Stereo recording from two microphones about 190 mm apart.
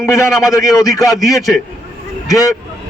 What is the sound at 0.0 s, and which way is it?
Speech, 15° left (ahead or behind).